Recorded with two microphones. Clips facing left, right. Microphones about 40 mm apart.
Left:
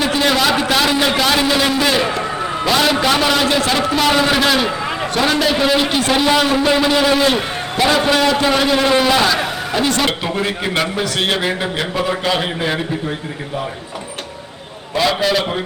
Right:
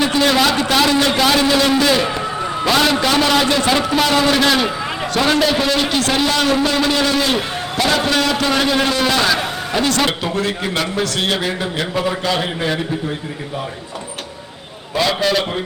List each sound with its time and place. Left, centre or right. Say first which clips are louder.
0.0 s a sound: right 1 dB; centre
0.5 s a man's voice: even; centre
1.8 s a sound: even; centre
3.6 s a man's voice: right 1 dB; centre
3.9 s a man's voice: left 1 dB; centre
10.2 s a man's voice: even; centre
14.9 s a man's voice: left 1 dB; centre